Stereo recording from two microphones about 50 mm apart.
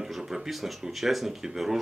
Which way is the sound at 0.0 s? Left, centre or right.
Centre.